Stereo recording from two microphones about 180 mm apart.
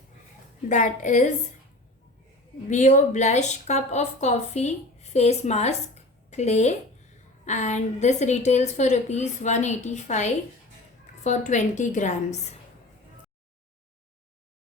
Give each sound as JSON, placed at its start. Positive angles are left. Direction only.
{"t": 0.7, "sound": "a woman's voice", "side_deg": 45}
{"t": 2.6, "sound": "speech", "side_deg": 40}